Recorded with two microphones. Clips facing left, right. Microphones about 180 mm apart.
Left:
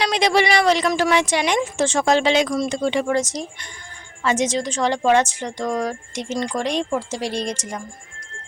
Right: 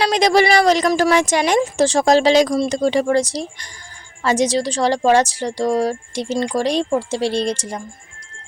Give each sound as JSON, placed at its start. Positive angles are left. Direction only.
{"t": 0.0, "sound": "speech", "side_deg": -40}